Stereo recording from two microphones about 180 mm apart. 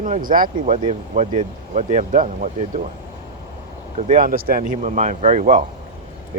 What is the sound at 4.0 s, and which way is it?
Speech, 45° right (ahead or behind).